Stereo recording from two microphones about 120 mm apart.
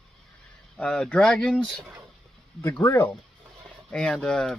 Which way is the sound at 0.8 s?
10° left (ahead or behind).